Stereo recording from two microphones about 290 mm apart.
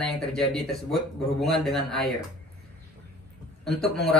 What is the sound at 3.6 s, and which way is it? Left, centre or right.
Speech, centre.